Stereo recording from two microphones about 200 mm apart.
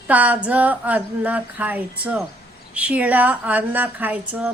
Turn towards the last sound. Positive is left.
turn(degrees=-10)  # may be behind; listen again after turning